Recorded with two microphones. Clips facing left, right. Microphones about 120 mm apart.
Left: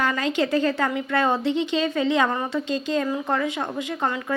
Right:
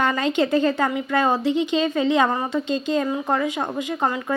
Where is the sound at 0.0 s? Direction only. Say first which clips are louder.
Right 2 dB; 25° right (ahead or behind).